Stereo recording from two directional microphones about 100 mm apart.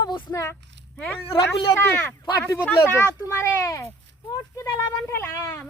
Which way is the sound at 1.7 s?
20° left (ahead or behind).